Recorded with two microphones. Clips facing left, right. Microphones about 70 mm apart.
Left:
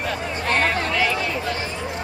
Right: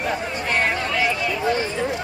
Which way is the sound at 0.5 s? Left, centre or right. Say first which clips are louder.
Left 1 dB; centre.